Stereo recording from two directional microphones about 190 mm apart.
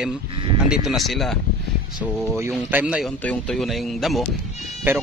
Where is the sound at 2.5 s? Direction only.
5° right (ahead or behind).